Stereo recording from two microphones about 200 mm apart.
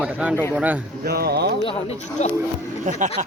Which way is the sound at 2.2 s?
35° left (ahead or behind).